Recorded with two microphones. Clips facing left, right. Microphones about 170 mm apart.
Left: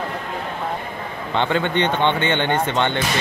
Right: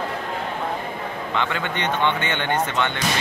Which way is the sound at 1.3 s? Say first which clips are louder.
Left 7 dB; 30° left (ahead or behind).